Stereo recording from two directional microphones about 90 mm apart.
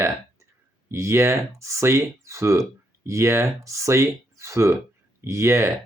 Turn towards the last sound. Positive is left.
turn(degrees=-30)  # may be behind; listen again after turning